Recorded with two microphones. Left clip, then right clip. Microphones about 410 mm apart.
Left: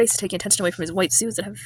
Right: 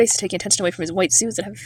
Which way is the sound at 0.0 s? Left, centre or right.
Left.